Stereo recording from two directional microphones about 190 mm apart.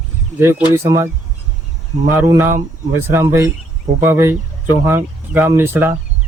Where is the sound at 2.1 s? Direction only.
15° right (ahead or behind).